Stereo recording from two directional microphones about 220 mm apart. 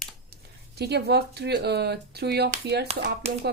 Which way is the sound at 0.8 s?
50° right (ahead or behind).